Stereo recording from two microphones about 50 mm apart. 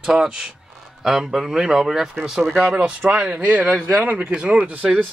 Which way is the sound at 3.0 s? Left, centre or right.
Right.